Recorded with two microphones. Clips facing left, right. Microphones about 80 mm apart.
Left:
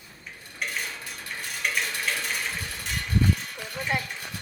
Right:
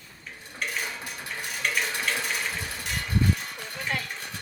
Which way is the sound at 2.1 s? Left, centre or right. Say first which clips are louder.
Right 1 dB; centre.